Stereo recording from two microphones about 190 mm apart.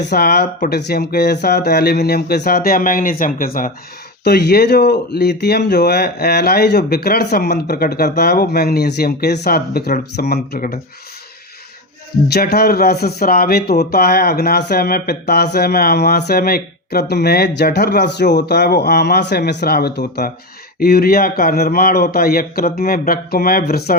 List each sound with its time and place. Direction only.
0.1 s a man's voice: 55° left (ahead or behind)
4.2 s speech: 60° left (ahead or behind)
12.3 s a man's voice: 55° left (ahead or behind)